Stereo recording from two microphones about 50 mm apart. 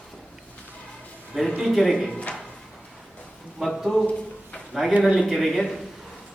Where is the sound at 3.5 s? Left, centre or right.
Centre.